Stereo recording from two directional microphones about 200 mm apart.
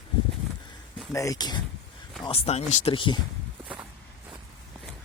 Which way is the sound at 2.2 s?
30° left (ahead or behind).